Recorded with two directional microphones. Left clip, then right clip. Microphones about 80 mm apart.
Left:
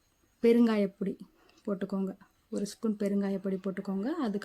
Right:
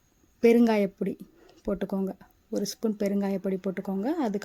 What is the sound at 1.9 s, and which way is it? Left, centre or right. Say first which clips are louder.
Speech: right 4 dB; right.